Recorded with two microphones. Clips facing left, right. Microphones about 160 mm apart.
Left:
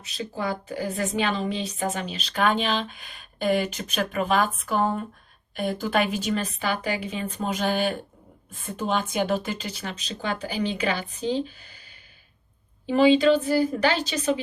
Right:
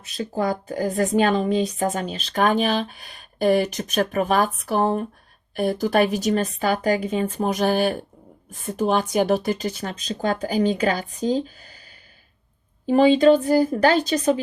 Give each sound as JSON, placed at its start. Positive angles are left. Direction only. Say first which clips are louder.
{"t": 0.0, "sound": "a woman's voice", "louder": "right 6 dB", "side_deg": -50}